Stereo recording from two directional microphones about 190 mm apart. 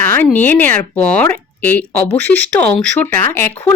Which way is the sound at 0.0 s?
10° left (ahead or behind).